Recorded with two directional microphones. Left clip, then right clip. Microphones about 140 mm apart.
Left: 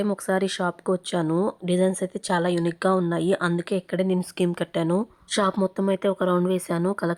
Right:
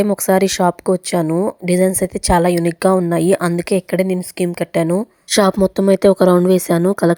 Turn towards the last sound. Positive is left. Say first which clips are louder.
# right 11 dB
turn(degrees=-45)  # may be behind; listen again after turning